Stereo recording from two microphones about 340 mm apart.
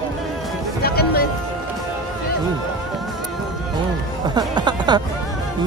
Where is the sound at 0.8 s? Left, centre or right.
Left.